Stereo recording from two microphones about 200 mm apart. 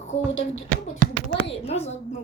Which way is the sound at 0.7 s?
40° right (ahead or behind).